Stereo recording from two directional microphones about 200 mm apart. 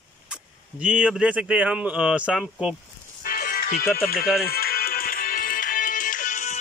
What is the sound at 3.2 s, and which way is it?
Music, 45° left (ahead or behind).